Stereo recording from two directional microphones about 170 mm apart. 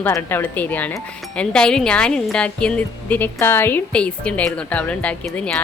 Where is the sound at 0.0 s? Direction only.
15° left (ahead or behind).